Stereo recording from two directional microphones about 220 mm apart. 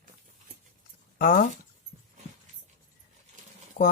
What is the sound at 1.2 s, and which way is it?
Speech, 40° left (ahead or behind).